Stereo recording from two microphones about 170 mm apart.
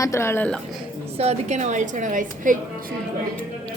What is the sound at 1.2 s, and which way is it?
A woman's voice, 40° right (ahead or behind).